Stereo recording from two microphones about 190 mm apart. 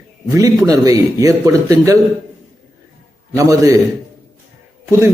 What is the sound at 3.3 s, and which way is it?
Speech, 15° right (ahead or behind).